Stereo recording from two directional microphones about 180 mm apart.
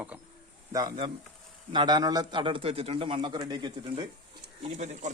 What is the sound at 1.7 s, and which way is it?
A man's voice, 20° right (ahead or behind).